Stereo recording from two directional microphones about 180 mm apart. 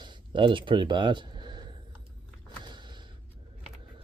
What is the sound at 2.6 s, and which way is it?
Creak, 25° right (ahead or behind).